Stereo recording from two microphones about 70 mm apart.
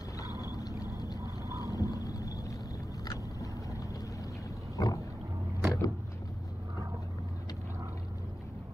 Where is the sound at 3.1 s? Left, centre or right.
Left.